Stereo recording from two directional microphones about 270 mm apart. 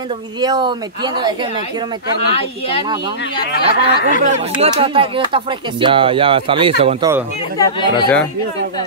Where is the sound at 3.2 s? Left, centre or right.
Left.